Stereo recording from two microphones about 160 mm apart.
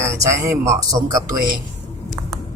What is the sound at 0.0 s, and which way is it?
Speech, 15° right (ahead or behind).